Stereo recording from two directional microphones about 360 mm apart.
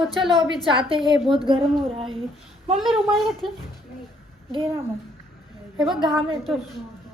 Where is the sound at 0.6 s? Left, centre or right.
Centre.